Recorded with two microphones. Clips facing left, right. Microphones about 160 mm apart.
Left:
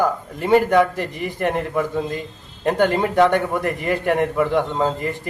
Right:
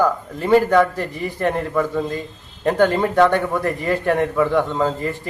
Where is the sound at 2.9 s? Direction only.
20° left (ahead or behind).